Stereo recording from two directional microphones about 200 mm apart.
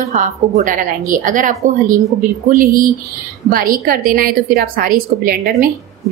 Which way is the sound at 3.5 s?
45° right (ahead or behind).